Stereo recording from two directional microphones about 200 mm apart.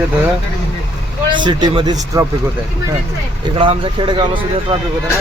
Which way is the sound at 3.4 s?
25° right (ahead or behind).